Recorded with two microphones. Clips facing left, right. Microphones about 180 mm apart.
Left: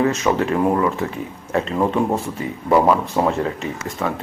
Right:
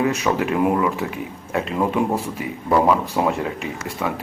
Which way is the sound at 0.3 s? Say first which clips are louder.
Left 1 dB; 10° right (ahead or behind).